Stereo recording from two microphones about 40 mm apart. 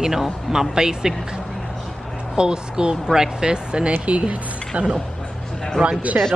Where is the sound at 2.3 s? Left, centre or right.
Right.